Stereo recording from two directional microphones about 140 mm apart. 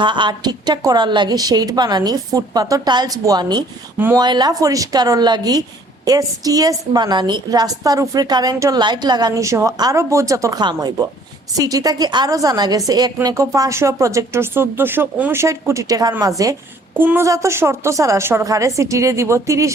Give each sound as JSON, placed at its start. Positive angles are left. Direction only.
{"t": 0.0, "sound": "a woman's voice", "side_deg": -35}
{"t": 3.9, "sound": "speech", "side_deg": -15}
{"t": 4.2, "sound": "a woman's voice", "side_deg": -30}